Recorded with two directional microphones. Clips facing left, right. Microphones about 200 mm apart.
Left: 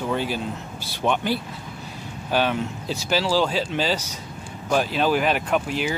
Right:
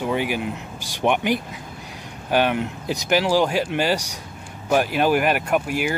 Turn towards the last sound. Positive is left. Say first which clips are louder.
# right 2 dB
turn(degrees=-10)  # may be behind; listen again after turning